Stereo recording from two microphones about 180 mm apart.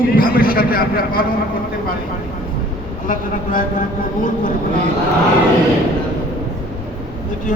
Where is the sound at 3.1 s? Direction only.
50° left (ahead or behind).